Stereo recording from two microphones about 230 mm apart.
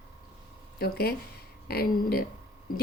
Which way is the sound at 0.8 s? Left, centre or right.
Left.